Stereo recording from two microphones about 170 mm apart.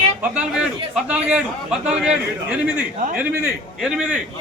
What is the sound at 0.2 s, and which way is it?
A man's voice, 5° right (ahead or behind).